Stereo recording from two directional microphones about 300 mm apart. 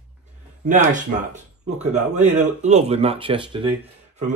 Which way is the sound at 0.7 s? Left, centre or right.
Right.